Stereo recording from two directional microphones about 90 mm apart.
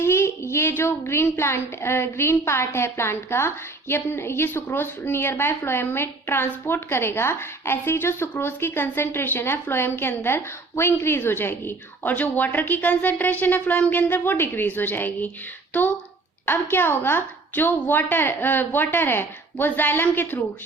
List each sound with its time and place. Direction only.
0.0 s a woman's voice: 30° left (ahead or behind)
16.5 s a woman's voice: 25° left (ahead or behind)